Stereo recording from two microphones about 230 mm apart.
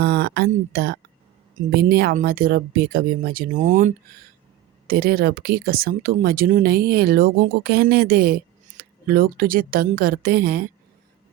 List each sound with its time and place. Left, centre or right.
0.0 s speech: right